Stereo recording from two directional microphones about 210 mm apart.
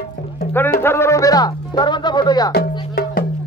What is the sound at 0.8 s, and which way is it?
Speech, 10° left (ahead or behind).